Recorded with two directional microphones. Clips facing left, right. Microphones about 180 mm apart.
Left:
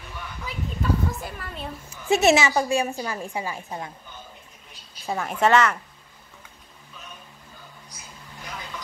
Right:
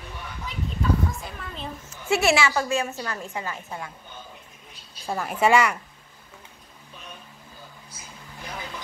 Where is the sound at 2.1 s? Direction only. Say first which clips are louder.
Left 3 dB; 20° left (ahead or behind).